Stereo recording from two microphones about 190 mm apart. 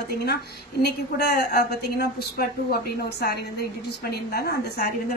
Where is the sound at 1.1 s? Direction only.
55° left (ahead or behind).